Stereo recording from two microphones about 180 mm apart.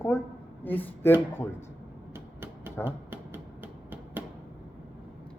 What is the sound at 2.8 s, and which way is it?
Typewriter, 10° right (ahead or behind).